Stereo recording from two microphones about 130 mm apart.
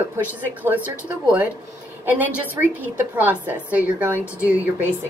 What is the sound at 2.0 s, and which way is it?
A woman's voice, 15° right (ahead or behind).